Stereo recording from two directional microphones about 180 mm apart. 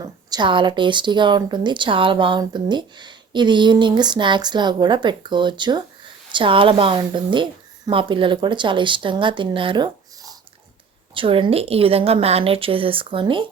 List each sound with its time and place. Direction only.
0.0 s a woman's voice: 25° right (ahead or behind)